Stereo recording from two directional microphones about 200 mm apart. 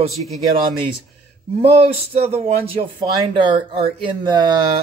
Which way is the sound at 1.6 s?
30° right (ahead or behind).